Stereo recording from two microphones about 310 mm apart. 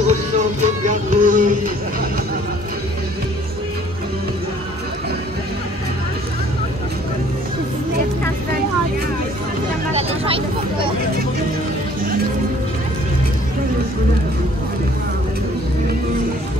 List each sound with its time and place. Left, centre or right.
0.0 s music: right
9.9 s vehicle: centre